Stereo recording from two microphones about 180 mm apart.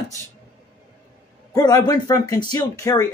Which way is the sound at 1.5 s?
20° left (ahead or behind).